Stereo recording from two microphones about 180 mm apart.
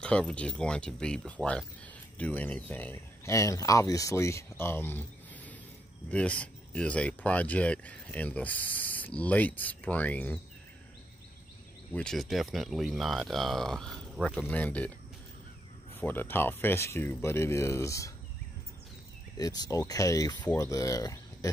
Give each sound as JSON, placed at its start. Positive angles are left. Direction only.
{"t": 0.0, "sound": "speech", "side_deg": 5}
{"t": 11.9, "sound": "speech", "side_deg": 5}
{"t": 16.0, "sound": "speech", "side_deg": 10}
{"t": 19.3, "sound": "speech", "side_deg": 20}